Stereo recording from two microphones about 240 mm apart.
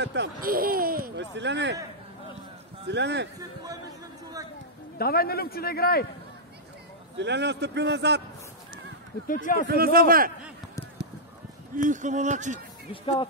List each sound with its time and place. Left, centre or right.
0.0 s speech: right
2.9 s a man's voice: right
4.9 s a man's voice: left
7.2 s a man's voice: right
9.3 s a man's voice: left
9.7 s a man's voice: right
11.7 s a man's voice: right
12.9 s speech: left